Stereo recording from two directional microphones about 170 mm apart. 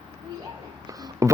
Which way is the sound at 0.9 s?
20° right (ahead or behind).